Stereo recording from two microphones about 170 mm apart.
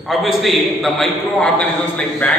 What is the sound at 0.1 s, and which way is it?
A man's voice, centre (ahead or behind).